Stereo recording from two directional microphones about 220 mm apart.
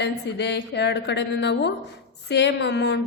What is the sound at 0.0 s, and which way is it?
A woman's voice, 50° left (ahead or behind).